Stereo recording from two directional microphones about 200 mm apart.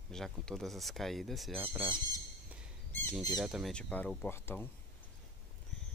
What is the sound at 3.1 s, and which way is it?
Speech, centre (ahead or behind).